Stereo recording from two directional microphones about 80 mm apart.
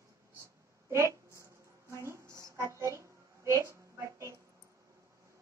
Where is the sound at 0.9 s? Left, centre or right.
Right.